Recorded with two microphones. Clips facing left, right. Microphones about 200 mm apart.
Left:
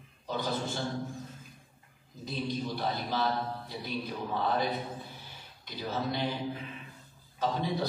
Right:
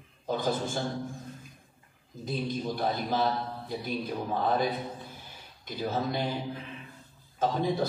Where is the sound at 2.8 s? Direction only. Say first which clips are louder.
Right 6 dB; 50° right (ahead or behind).